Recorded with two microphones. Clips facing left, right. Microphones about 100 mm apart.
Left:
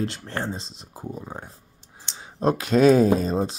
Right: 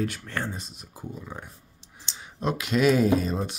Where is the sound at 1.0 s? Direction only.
35° left (ahead or behind).